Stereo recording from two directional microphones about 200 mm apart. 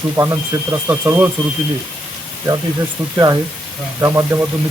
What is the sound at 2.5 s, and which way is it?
Speech, 20° right (ahead or behind).